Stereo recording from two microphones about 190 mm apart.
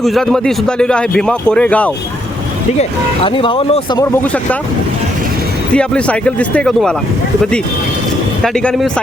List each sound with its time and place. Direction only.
0.0 s speech: centre (ahead or behind)
3.2 s speech: 25° left (ahead or behind)
5.7 s speech: 5° left (ahead or behind)
8.5 s speech: 5° left (ahead or behind)